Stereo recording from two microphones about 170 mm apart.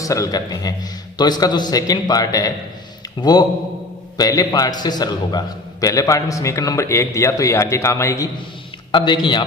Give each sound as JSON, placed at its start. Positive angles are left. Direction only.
{"t": 0.0, "sound": "a man's voice", "side_deg": 20}